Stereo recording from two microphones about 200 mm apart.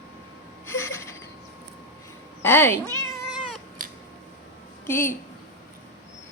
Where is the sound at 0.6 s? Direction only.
15° left (ahead or behind).